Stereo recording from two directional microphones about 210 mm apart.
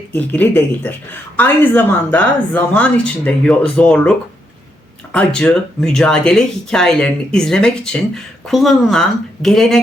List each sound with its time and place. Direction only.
0.1 s a woman's voice: 10° left (ahead or behind)
5.1 s speech: 5° left (ahead or behind)